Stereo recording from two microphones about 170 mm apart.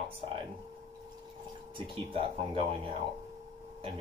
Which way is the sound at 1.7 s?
30° right (ahead or behind).